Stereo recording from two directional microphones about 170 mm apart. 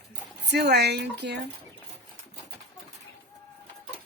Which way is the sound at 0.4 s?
85° right.